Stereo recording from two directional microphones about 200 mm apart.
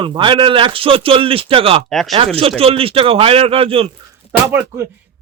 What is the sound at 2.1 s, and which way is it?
A man's voice, 30° right (ahead or behind).